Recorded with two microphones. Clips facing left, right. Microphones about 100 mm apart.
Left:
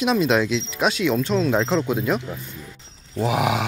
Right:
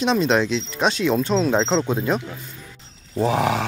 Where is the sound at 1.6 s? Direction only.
20° right (ahead or behind).